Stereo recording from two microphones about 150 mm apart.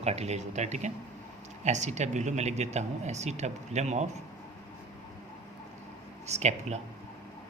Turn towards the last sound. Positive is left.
turn(degrees=-45)  # may be behind; listen again after turning